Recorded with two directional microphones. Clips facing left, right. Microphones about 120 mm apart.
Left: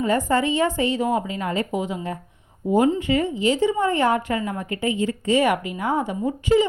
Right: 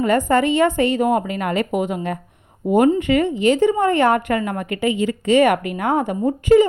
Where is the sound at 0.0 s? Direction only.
60° right (ahead or behind).